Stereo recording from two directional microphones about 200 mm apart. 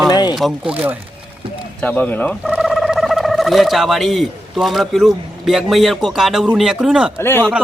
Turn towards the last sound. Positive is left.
turn(degrees=10)  # may be behind; listen again after turning